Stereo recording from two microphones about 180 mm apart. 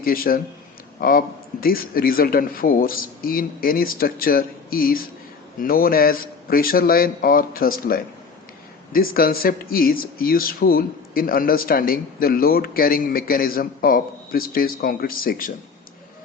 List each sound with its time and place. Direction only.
0.0 s speech: 55° left (ahead or behind)